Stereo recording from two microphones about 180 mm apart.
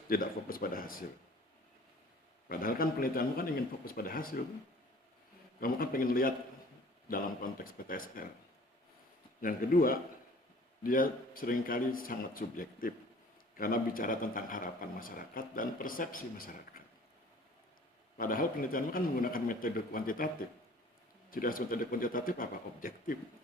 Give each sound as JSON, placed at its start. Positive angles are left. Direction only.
{"t": 0.1, "sound": "a man's voice", "side_deg": 55}
{"t": 2.5, "sound": "a man's voice", "side_deg": 55}
{"t": 5.5, "sound": "a man's voice", "side_deg": 55}
{"t": 9.4, "sound": "a man's voice", "side_deg": 50}
{"t": 18.2, "sound": "a man's voice", "side_deg": 50}